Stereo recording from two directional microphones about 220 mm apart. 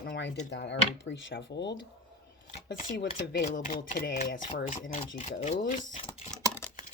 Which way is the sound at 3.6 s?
40° left (ahead or behind).